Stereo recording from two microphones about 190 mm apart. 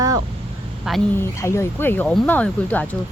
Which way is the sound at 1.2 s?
15° left (ahead or behind).